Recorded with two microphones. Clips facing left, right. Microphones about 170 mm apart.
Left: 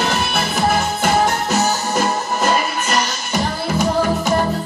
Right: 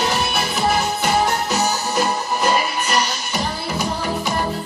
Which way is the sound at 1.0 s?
50° left (ahead or behind).